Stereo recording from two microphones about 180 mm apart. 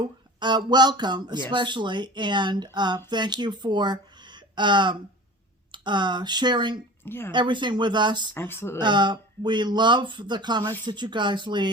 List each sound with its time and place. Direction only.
0.3 s speech: 25° right (ahead or behind)
7.0 s a woman's voice: 10° left (ahead or behind)
7.3 s speech: 25° right (ahead or behind)
8.4 s speech: 15° left (ahead or behind)
8.8 s speech: 25° right (ahead or behind)